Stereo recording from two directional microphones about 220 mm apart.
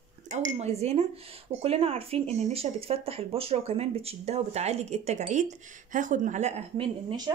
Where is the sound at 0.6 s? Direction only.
30° right (ahead or behind).